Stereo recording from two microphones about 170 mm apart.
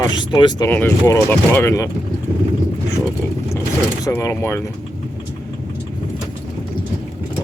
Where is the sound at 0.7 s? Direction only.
15° left (ahead or behind).